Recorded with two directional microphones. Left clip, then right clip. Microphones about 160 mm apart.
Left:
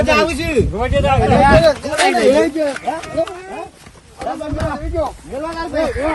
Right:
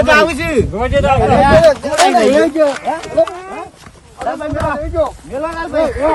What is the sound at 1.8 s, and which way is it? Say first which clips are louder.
Speech: right 5 dB; 35° right (ahead or behind).